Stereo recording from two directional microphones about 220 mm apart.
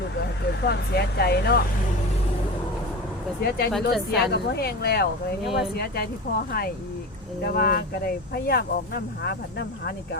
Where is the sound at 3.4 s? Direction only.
45° left (ahead or behind).